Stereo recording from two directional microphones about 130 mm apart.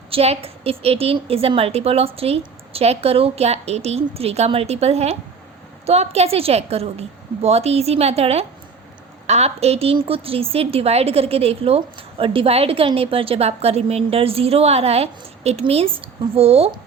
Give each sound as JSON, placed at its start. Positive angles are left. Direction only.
{"t": 0.1, "sound": "a woman's voice", "side_deg": -50}